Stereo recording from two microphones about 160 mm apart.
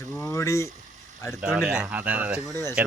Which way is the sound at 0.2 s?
20° left (ahead or behind).